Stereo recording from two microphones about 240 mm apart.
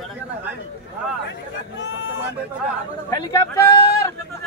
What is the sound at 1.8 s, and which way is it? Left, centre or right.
Speech, left.